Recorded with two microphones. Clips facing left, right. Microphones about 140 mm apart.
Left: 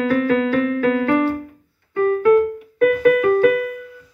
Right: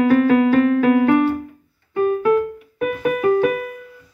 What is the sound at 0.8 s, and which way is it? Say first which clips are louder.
Music: right 3 dB; 20° right (ahead or behind).